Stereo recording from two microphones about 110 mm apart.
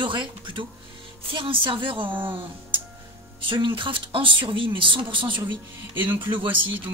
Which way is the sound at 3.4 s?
50° right (ahead or behind).